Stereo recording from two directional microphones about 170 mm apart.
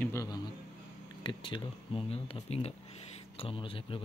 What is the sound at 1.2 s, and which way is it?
Speech, 30° left (ahead or behind).